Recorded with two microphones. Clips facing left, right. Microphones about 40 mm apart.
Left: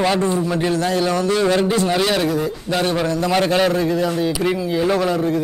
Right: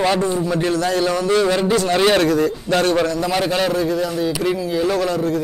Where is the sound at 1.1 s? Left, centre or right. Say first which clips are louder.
Right 1 dB; centre.